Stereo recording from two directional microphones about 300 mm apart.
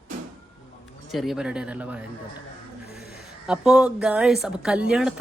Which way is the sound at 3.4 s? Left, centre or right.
Centre.